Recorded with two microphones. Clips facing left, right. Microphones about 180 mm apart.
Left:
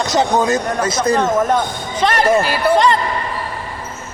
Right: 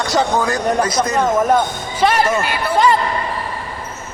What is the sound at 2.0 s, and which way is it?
Speech, 10° right (ahead or behind).